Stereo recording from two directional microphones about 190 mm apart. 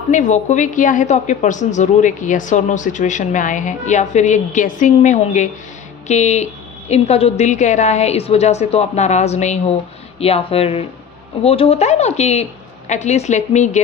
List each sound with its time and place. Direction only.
0.1 s a woman's voice: 40° left (ahead or behind)